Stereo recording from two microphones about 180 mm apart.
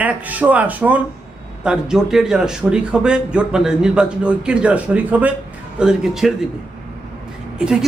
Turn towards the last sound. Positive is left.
turn(degrees=-5)  # may be behind; listen again after turning